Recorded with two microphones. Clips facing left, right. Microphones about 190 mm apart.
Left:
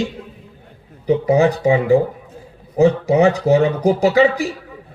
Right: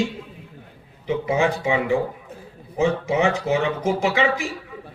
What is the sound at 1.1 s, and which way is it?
Speech, 35° left (ahead or behind).